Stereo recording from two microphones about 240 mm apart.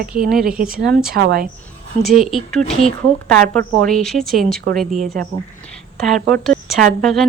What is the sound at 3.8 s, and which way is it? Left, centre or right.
A woman's voice, centre.